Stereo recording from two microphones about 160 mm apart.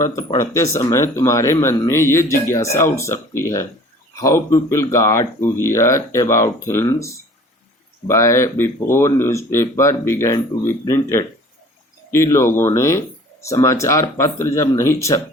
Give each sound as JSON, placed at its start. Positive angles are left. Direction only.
{"t": 0.3, "sound": "speech", "side_deg": 20}